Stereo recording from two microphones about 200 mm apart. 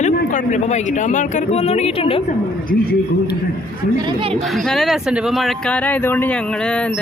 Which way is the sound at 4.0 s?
25° right (ahead or behind).